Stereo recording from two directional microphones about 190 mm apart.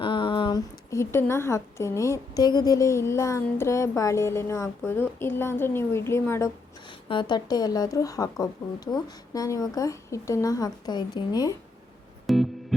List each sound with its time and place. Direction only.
0.0 s a woman's voice: 25° left (ahead or behind)
7.1 s a woman's voice: 25° left (ahead or behind)
12.2 s music: centre (ahead or behind)